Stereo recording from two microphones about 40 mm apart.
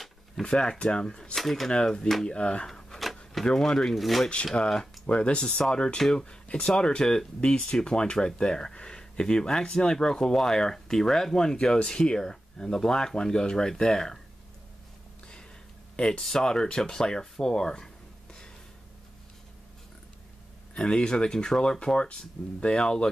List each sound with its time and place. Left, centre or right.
0.4 s speech: left
1.3 s speech: centre
2.2 s speech: left
3.9 s speech: centre
5.0 s speech: left; by 14.2 s centre
16.0 s speech: centre
20.7 s speech: left